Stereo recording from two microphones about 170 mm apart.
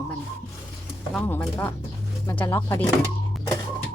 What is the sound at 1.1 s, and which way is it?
Speech, 10° left (ahead or behind).